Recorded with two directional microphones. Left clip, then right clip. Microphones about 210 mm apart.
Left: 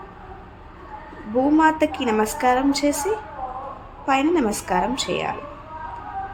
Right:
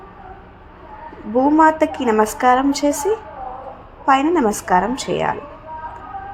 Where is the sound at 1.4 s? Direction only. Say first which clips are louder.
Right 4 dB; 5° right (ahead or behind).